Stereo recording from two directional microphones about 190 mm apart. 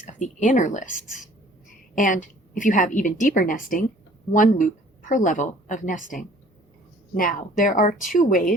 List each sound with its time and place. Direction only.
0.1 s a woman's voice: 40° left (ahead or behind)
7.2 s a woman's voice: 45° left (ahead or behind)